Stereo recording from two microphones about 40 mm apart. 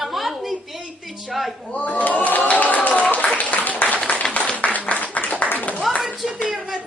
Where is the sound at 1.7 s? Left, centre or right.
Left.